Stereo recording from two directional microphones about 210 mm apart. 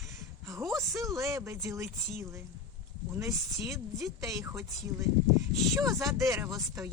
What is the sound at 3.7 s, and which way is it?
Speech, 15° right (ahead or behind).